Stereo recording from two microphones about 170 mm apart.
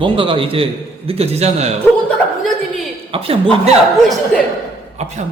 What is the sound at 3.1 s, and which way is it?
Speech, 35° right (ahead or behind).